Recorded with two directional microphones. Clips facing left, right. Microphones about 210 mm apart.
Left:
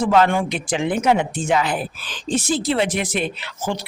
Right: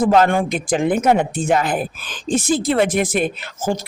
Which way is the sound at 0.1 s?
45° right (ahead or behind).